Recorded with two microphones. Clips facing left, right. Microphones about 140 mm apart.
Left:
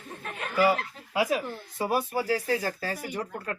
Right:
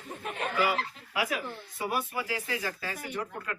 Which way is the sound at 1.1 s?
30° left (ahead or behind).